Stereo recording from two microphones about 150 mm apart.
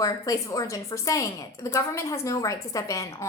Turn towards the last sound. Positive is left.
turn(degrees=20)  # may be behind; listen again after turning